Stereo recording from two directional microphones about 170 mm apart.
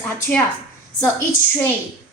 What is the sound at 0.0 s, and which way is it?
Speech, 10° left (ahead or behind).